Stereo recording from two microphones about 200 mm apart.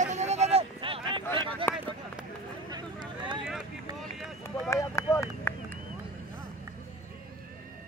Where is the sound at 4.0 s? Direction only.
Centre (ahead or behind).